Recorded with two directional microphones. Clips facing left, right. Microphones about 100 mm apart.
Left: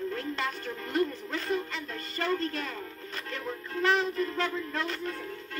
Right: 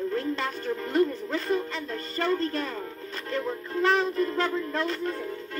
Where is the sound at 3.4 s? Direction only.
20° right (ahead or behind).